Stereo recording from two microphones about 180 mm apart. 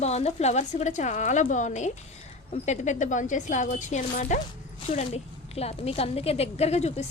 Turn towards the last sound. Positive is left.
turn(degrees=35)  # may be behind; listen again after turning